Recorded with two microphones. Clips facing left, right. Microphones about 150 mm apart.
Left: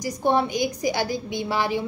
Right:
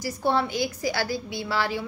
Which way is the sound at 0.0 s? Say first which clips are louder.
Left 3 dB; 15° left (ahead or behind).